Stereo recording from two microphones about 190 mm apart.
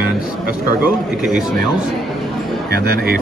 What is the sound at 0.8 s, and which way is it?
Speech, 5° right (ahead or behind).